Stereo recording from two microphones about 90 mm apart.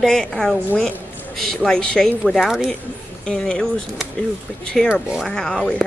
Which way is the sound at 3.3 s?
10° left (ahead or behind).